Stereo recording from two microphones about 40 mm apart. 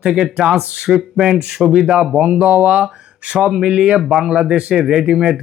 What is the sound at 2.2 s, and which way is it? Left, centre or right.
Speech, right.